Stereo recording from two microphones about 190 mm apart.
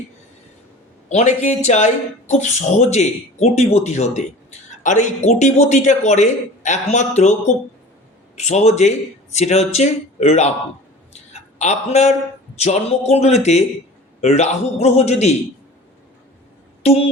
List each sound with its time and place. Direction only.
1.1 s a man's voice: 40° left (ahead or behind)
11.1 s a sound: 35° left (ahead or behind)
12.5 s a man's voice: 35° left (ahead or behind)
16.8 s speech: 35° left (ahead or behind)